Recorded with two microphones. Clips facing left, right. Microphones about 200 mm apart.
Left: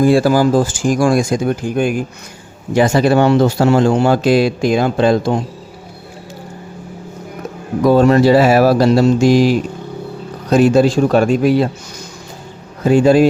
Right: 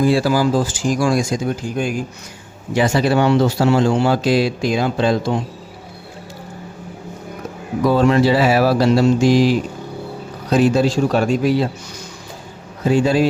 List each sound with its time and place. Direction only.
0.0 s speech: 50° left (ahead or behind)
2.7 s speech: 45° left (ahead or behind)
7.9 s speech: 45° left (ahead or behind)
12.8 s speech: 50° left (ahead or behind)